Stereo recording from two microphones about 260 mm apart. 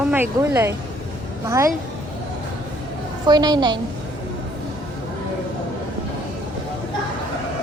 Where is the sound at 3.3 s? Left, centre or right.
Centre.